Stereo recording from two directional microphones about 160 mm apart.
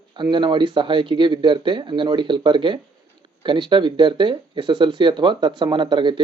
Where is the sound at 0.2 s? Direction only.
30° right (ahead or behind).